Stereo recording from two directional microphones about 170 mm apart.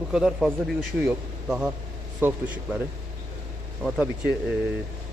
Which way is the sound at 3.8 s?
5° right (ahead or behind).